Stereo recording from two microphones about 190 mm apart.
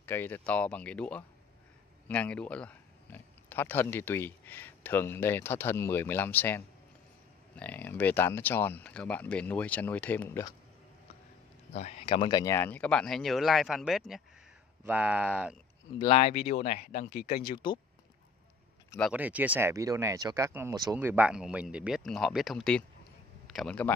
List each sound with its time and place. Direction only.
0.0 s speech: 10° left (ahead or behind)
11.7 s speech: 35° left (ahead or behind); by 15.5 s 5° right (ahead or behind)
16.0 s speech: 30° left (ahead or behind)
16.5 s speech: 50° left (ahead or behind)
19.1 s speech: 10° right (ahead or behind)